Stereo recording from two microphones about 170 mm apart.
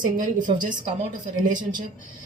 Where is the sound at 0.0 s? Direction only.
50° right (ahead or behind).